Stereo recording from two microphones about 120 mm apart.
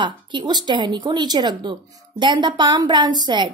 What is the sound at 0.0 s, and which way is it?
Speech, 40° right (ahead or behind).